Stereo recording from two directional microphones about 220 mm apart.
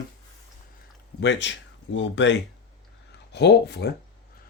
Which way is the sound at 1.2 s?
55° left (ahead or behind).